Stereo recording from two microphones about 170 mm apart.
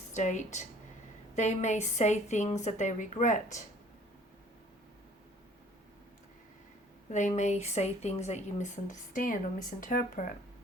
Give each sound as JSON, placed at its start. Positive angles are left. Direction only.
{"t": 0.1, "sound": "speech", "side_deg": 45}
{"t": 7.1, "sound": "speech", "side_deg": 45}